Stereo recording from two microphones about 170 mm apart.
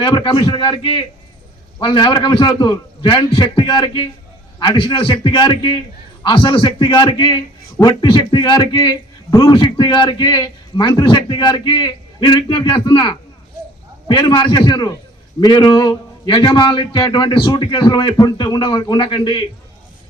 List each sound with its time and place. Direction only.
0.0 s a man's voice: 25° left (ahead or behind)